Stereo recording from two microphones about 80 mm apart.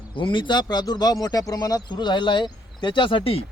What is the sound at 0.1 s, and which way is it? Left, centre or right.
Speech, left.